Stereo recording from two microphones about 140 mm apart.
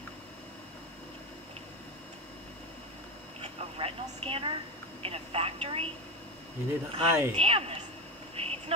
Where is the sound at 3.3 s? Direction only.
45° right (ahead or behind).